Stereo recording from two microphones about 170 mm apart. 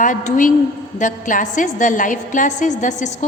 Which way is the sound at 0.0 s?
50° left (ahead or behind).